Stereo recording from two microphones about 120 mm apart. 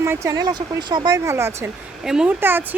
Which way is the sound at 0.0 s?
25° right (ahead or behind).